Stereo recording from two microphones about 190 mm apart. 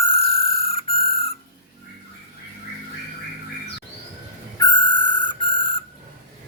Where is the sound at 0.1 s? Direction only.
30° left (ahead or behind).